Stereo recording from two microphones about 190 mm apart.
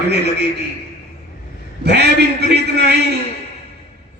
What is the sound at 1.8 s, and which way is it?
Speech, 60° right (ahead or behind).